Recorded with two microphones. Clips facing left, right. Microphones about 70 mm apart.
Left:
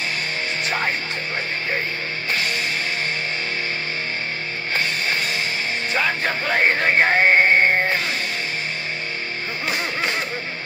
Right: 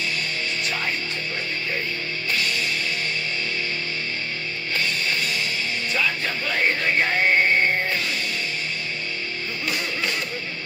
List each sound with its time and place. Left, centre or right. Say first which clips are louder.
0.7 s music: left 5 dB; left
2.3 s music: left 1 dB; left
4.7 s music: left 2 dB; left